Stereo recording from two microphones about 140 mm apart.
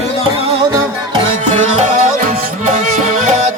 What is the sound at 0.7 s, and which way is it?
Music, 25° right (ahead or behind).